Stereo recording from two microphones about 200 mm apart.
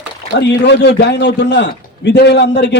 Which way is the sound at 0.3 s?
60° left (ahead or behind).